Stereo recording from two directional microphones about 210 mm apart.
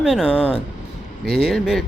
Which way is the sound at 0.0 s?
Centre (ahead or behind).